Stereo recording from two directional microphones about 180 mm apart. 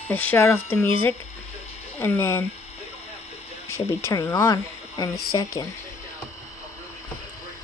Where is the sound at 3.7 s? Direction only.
15° left (ahead or behind).